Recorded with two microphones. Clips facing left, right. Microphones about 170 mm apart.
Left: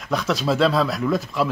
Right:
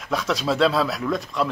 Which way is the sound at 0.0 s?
Centre (ahead or behind).